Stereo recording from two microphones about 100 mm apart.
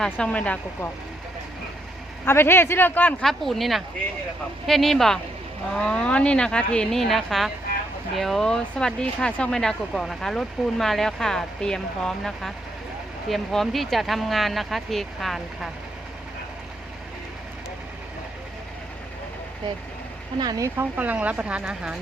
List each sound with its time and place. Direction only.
0.0 s speech: 10° left (ahead or behind)
2.2 s speech: 25° left (ahead or behind)
3.2 s speech: centre (ahead or behind)
20.4 s speech: 35° right (ahead or behind)
20.9 s a woman's voice: 15° right (ahead or behind)